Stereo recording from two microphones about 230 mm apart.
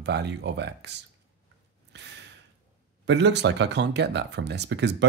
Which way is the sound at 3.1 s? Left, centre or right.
Right.